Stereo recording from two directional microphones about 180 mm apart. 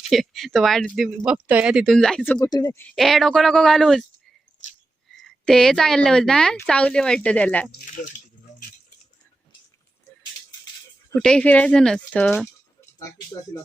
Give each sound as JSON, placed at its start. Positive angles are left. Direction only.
{"t": 0.1, "sound": "speech", "side_deg": 0}
{"t": 5.2, "sound": "speech", "side_deg": 0}
{"t": 11.1, "sound": "speech", "side_deg": 5}
{"t": 12.8, "sound": "speech", "side_deg": 20}